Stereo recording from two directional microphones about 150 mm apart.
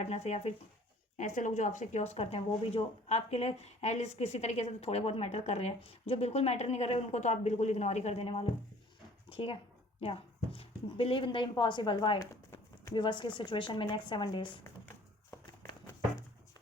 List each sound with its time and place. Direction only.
0.0 s speech: 45° left (ahead or behind)
1.2 s speech: 55° left (ahead or behind); by 12.2 s 35° left (ahead or behind)
12.2 s a sound: 15° left (ahead or behind)
12.9 s speech: 30° left (ahead or behind)